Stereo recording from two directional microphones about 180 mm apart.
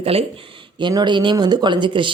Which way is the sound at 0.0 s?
30° right (ahead or behind).